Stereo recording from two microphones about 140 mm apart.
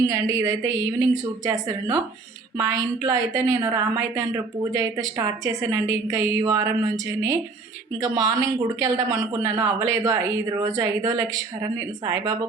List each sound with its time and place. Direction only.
0.1 s speech: 25° right (ahead or behind)
8.0 s speech: 25° right (ahead or behind)